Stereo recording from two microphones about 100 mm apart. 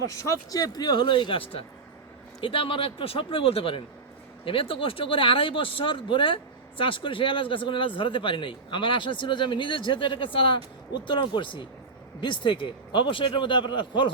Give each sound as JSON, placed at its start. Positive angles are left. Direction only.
{"t": 0.0, "sound": "speech", "side_deg": 35}